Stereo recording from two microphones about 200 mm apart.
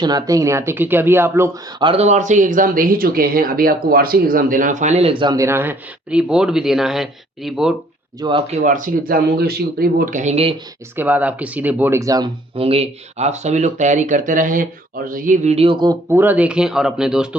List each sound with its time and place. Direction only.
0.0 s speech: 20° right (ahead or behind)
1.8 s speech: 30° right (ahead or behind); by 7.8 s centre (ahead or behind)
8.2 s speech: 25° right (ahead or behind)
8.6 s speech: 40° right (ahead or behind)
10.9 s speech: 10° right (ahead or behind)
16.0 s speech: 10° right (ahead or behind)